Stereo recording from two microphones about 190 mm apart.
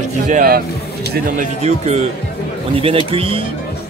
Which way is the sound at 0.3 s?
50° right (ahead or behind).